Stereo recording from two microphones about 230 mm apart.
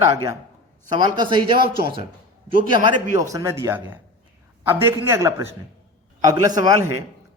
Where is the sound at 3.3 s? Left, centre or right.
Centre.